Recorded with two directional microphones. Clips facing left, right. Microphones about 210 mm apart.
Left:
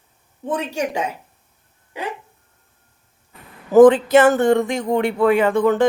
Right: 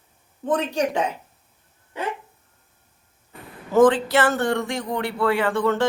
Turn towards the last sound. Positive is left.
turn(degrees=20)  # may be behind; listen again after turning